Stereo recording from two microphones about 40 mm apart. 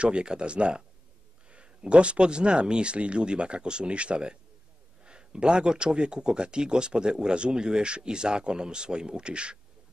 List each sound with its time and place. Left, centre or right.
0.0 s speech: right